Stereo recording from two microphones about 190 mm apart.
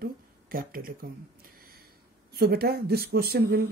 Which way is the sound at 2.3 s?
55° right (ahead or behind).